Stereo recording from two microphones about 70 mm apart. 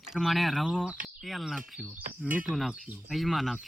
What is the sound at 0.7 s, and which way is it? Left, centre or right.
Speech, centre.